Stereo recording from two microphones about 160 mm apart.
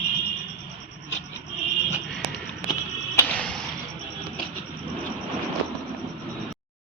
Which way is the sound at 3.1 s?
10° left (ahead or behind).